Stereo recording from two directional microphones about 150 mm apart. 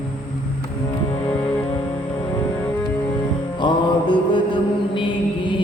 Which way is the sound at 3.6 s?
35° left (ahead or behind).